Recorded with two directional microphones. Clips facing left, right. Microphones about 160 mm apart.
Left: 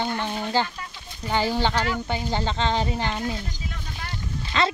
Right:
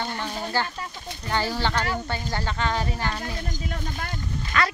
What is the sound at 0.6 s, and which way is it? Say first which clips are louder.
Speech: left 3 dB; 20° left (ahead or behind).